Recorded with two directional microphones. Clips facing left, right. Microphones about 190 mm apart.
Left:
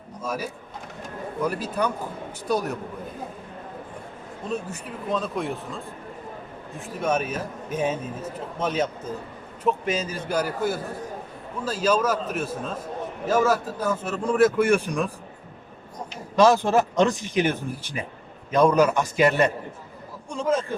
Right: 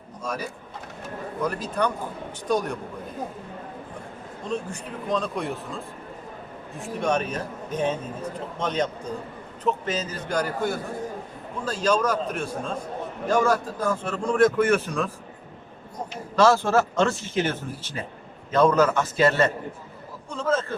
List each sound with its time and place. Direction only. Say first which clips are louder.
0.2 s a man's voice: left 1 dB; 5° left (ahead or behind)
4.4 s a man's voice: even; 5° left (ahead or behind)
16.3 s a man's voice: left 1 dB; 15° left (ahead or behind)